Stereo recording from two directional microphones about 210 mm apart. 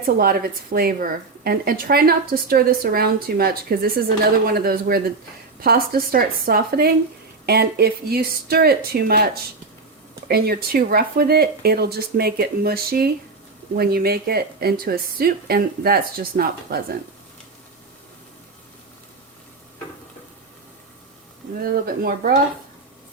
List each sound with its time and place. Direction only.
0.0 s a woman's voice: 45° right (ahead or behind)
21.5 s a woman's voice: 45° right (ahead or behind)